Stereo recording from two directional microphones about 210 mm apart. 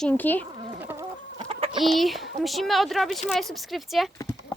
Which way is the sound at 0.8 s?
10° right (ahead or behind).